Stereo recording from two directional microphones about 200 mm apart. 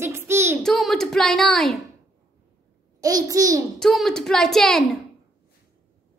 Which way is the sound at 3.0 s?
15° right (ahead or behind).